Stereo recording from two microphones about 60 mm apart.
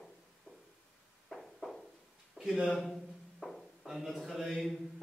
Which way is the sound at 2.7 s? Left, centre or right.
Centre.